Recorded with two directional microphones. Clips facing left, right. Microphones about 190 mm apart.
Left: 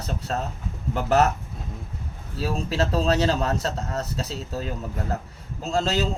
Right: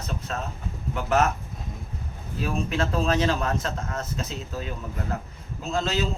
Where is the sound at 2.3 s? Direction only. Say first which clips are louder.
Left 1 dB; 35° left (ahead or behind).